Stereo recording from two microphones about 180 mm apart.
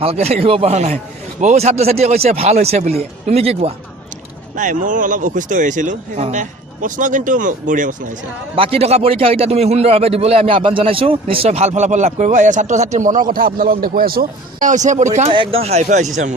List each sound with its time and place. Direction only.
0.0 s a man's voice: 35° right (ahead or behind)
4.5 s speech: 45° right (ahead or behind)
8.5 s a man's voice: 30° right (ahead or behind)
15.3 s a man's voice: 30° right (ahead or behind)